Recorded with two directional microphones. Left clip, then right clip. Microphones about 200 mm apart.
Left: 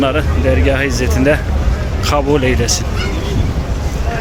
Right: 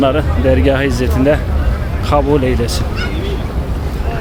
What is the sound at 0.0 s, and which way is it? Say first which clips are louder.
Speech: right 2 dB; 10° right (ahead or behind).